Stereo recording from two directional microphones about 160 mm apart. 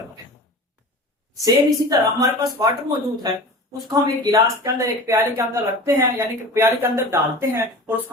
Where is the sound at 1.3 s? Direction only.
20° right (ahead or behind).